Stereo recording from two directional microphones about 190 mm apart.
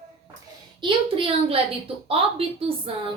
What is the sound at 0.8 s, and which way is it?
A woman's voice, 25° right (ahead or behind).